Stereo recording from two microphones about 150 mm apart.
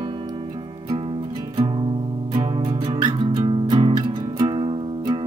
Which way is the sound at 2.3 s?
35° right (ahead or behind).